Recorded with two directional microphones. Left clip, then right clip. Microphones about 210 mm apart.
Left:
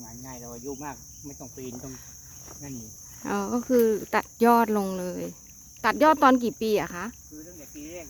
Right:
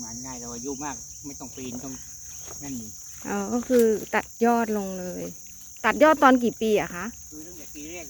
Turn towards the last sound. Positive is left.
turn(degrees=15)  # may be behind; listen again after turning